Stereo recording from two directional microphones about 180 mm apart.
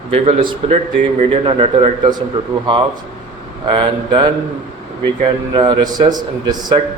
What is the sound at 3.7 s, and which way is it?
Speech, 25° right (ahead or behind).